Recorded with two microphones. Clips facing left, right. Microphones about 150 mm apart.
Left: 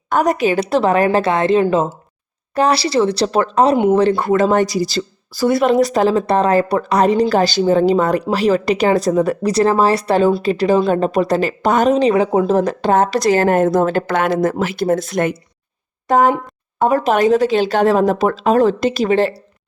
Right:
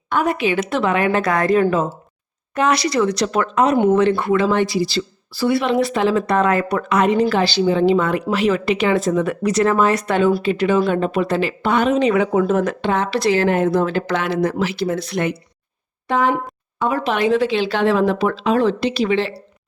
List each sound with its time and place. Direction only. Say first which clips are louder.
0.1 s a woman's voice: left 4 dB; 40° left (ahead or behind)